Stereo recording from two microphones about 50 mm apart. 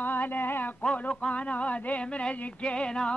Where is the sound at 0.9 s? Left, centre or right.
Left.